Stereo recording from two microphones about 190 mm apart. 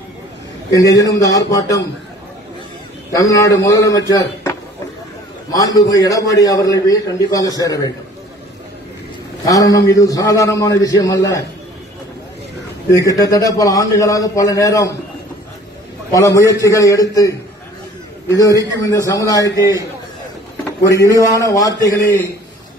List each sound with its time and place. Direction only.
0.7 s a man's voice: 20° left (ahead or behind)
3.2 s a man's voice: 15° left (ahead or behind)
9.5 s a man's voice: 20° left (ahead or behind)
13.0 s a man's voice: 20° left (ahead or behind)
16.1 s a man's voice: 15° left (ahead or behind)
18.8 s a man's voice: 15° left (ahead or behind)
20.9 s a man's voice: 15° left (ahead or behind)